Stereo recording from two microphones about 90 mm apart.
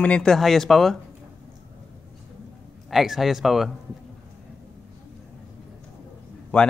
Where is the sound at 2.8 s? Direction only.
Centre (ahead or behind).